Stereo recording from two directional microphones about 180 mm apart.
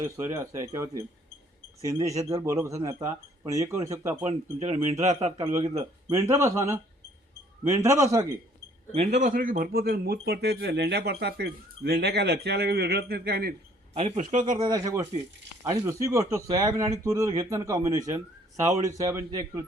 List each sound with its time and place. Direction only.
0.0 s speech: 15° right (ahead or behind)
4.2 s speech: 35° right (ahead or behind)
6.1 s speech: 15° right (ahead or behind)
8.9 s speech: 40° right (ahead or behind); by 13.5 s 60° right (ahead or behind)
13.9 s speech: 35° right (ahead or behind)
14.6 s speech: 20° right (ahead or behind)